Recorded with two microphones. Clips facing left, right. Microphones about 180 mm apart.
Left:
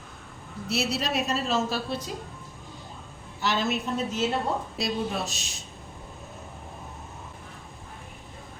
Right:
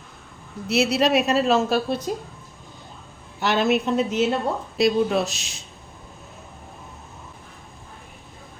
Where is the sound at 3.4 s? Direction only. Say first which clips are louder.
Right 7 dB; 65° right (ahead or behind).